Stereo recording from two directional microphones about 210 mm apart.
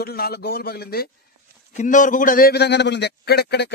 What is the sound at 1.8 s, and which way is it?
Speech, 35° left (ahead or behind).